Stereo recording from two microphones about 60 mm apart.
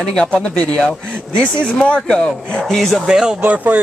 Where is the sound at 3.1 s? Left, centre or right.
Centre.